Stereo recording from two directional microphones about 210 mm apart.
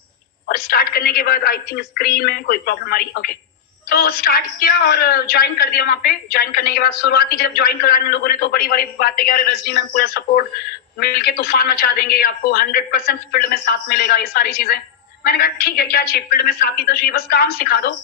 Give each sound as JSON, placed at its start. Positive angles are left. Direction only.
{"t": 0.4, "sound": "a woman's voice", "side_deg": 45}